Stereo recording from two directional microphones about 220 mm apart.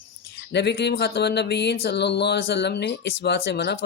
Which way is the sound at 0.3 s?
50° left (ahead or behind).